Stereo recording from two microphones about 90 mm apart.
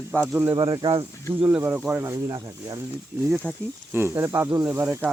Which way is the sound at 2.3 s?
45° right (ahead or behind).